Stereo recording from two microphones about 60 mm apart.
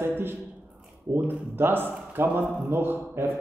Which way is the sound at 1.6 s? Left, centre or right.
Right.